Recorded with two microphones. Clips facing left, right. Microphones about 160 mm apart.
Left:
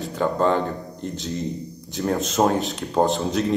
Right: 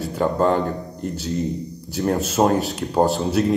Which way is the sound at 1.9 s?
5° right (ahead or behind).